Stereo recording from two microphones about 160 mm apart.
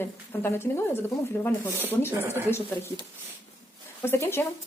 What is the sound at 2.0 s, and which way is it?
Speech, 15° right (ahead or behind).